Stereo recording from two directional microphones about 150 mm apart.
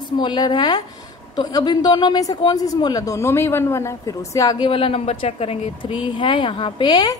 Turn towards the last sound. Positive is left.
turn(degrees=30)  # may be behind; listen again after turning